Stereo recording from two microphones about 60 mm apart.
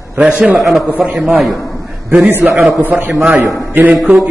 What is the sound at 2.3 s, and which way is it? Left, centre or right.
Speech, right.